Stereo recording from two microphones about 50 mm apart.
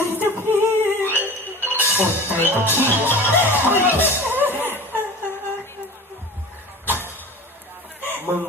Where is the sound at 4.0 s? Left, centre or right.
Right.